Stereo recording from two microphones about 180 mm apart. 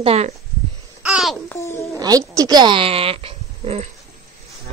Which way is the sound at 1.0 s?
Centre (ahead or behind).